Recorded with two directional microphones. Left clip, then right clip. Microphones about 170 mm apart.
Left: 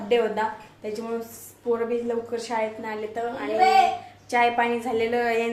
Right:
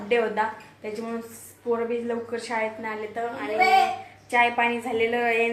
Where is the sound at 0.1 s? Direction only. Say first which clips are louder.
Left 1 dB; 10° left (ahead or behind).